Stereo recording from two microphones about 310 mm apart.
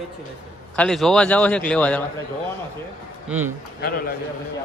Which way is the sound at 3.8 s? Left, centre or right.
Left.